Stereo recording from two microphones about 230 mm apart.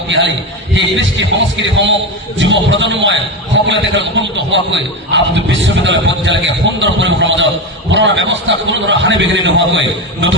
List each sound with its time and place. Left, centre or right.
0.7 s a man's voice: right